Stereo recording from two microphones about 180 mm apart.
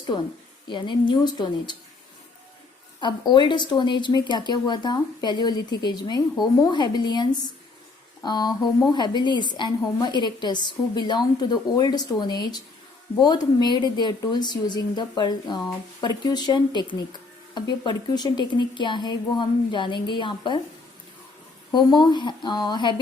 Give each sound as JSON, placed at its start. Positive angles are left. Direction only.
{"t": 0.1, "sound": "speech", "side_deg": 25}
{"t": 3.0, "sound": "speech", "side_deg": 25}
{"t": 21.7, "sound": "speech", "side_deg": 25}